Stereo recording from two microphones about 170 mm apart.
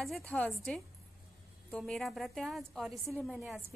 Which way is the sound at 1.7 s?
Centre (ahead or behind).